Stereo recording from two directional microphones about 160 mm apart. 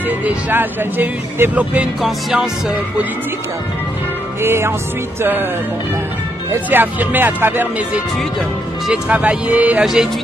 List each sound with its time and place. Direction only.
0.2 s speech: 10° right (ahead or behind)
4.4 s speech: 15° right (ahead or behind)
6.5 s speech: 10° right (ahead or behind)